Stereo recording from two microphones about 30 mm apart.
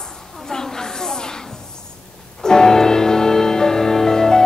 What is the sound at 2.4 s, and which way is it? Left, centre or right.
Music, left.